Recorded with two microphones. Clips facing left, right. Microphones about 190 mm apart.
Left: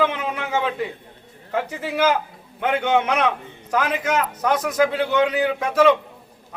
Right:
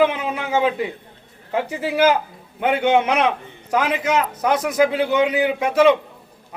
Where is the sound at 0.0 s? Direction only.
10° right (ahead or behind).